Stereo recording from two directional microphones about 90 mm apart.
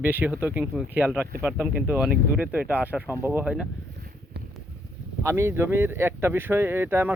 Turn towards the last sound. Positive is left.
turn(degrees=-25)  # may be behind; listen again after turning